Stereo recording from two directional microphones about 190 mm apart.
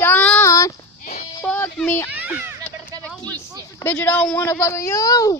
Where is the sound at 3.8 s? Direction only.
10° left (ahead or behind).